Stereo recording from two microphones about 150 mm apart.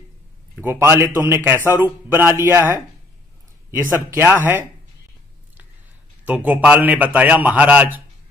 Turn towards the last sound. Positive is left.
turn(degrees=-10)  # may be behind; listen again after turning